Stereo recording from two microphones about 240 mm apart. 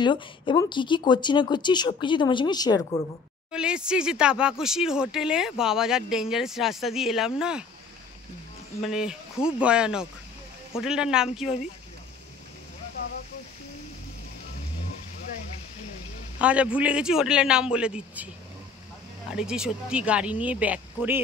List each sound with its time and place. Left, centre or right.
0.0 s speech: centre
3.5 s speech: centre
8.8 s speech: centre
16.3 s speech: centre
19.3 s speech: centre